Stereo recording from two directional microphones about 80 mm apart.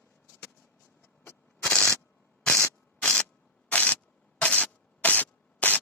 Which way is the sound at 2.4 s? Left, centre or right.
Centre.